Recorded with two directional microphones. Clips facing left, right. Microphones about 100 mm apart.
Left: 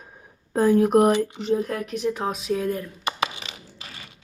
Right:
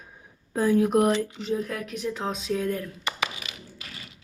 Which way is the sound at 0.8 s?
60° left (ahead or behind).